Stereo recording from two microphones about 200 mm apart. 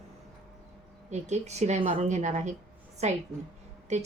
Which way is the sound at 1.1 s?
35° right (ahead or behind).